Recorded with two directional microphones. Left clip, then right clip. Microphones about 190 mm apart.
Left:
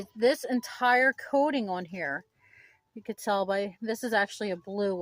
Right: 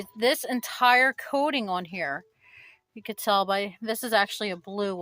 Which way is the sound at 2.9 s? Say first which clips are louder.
Right 5 dB; 15° right (ahead or behind).